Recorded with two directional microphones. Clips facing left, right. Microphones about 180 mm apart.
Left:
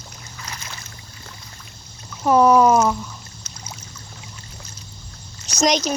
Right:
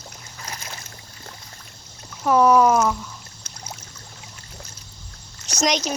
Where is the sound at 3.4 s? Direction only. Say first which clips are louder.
Even; 65° right (ahead or behind).